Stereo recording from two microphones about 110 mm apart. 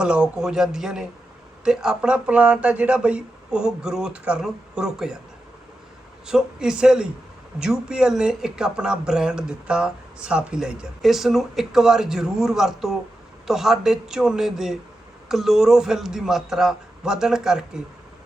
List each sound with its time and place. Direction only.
0.0 s speech: 10° right (ahead or behind)
6.2 s speech: 5° right (ahead or behind)